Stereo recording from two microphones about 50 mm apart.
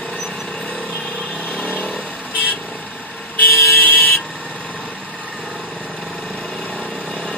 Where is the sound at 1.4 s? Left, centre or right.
Left.